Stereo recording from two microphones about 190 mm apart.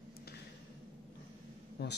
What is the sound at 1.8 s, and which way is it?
Speech, 60° left (ahead or behind).